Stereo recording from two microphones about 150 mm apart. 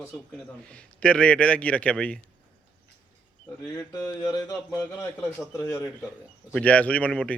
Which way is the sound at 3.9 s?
20° left (ahead or behind).